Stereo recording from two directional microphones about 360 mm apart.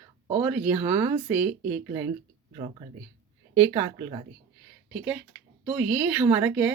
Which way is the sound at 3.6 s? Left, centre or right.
Centre.